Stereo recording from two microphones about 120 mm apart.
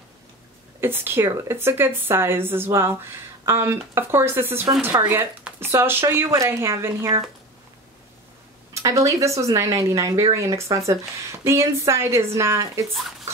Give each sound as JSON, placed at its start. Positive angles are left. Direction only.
{"t": 0.7, "sound": "speech", "side_deg": -20}
{"t": 8.8, "sound": "speech", "side_deg": -30}